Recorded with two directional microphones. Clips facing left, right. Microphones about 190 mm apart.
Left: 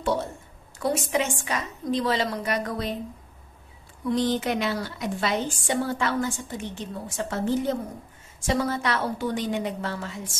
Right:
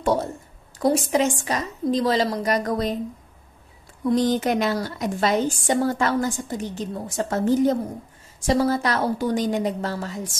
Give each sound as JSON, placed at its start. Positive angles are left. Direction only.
{"t": 0.0, "sound": "a woman's voice", "side_deg": -40}
{"t": 4.1, "sound": "a woman's voice", "side_deg": -45}